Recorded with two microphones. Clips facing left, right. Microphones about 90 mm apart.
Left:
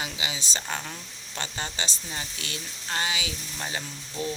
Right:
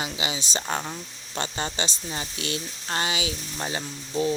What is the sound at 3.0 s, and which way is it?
Speech, 25° right (ahead or behind).